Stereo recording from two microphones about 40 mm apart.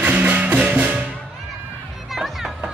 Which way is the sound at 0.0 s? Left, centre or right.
Right.